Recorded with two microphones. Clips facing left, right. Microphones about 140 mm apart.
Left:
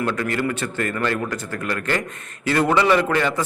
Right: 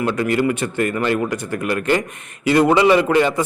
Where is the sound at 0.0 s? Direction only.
15° right (ahead or behind).